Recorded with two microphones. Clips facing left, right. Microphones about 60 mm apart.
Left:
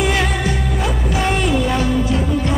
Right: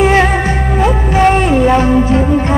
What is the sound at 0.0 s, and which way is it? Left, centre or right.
Music, right.